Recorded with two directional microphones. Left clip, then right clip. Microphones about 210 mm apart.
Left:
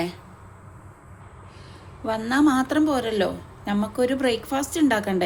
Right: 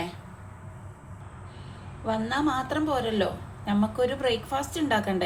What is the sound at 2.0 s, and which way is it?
A woman's voice, 35° left (ahead or behind).